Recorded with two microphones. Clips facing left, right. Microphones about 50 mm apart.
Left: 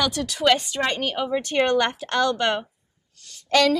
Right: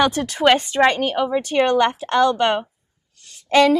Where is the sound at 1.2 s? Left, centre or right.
Centre.